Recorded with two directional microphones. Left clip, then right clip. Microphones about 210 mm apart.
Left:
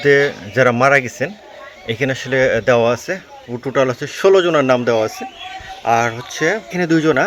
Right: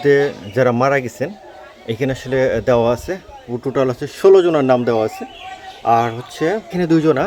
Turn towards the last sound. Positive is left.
turn(degrees=0)  # may be behind; listen again after turning